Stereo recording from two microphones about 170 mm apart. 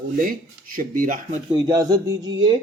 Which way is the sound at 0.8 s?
55° right (ahead or behind).